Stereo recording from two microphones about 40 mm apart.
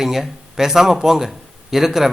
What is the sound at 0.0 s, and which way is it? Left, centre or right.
Speech, centre.